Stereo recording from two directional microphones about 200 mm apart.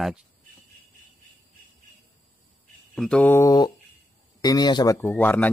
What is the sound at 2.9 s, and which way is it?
Speech, 5° left (ahead or behind).